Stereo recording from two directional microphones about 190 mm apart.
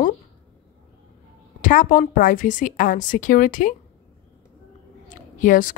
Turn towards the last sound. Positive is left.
turn(degrees=45)  # may be behind; listen again after turning